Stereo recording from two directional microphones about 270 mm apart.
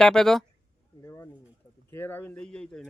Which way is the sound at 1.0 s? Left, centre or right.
Centre.